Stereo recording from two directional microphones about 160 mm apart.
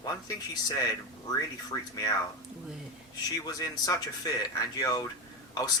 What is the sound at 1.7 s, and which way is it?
Speech, 25° left (ahead or behind).